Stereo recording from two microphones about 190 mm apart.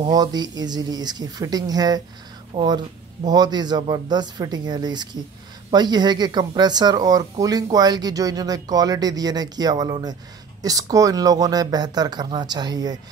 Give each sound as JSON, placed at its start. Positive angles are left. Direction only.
{"t": 0.0, "sound": "speech", "side_deg": -20}